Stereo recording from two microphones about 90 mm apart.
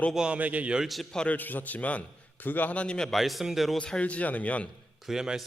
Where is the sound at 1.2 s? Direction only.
20° left (ahead or behind); by 3.8 s centre (ahead or behind).